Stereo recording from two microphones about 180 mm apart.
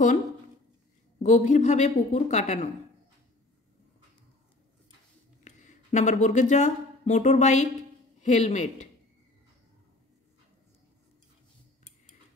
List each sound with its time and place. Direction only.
1.2 s a woman's voice: 40° left (ahead or behind)
5.4 s a woman's voice: 40° left (ahead or behind)